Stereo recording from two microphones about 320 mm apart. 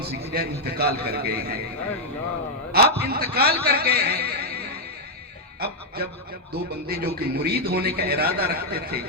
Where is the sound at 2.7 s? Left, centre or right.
Right.